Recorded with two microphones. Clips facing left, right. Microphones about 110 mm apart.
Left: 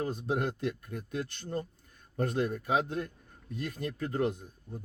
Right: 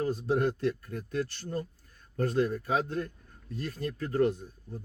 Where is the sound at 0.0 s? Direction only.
20° left (ahead or behind).